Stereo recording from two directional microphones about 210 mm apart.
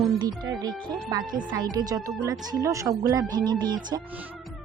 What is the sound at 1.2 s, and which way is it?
Speech, 40° right (ahead or behind).